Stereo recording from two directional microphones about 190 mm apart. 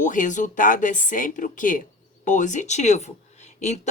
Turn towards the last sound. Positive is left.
turn(degrees=35)  # may be behind; listen again after turning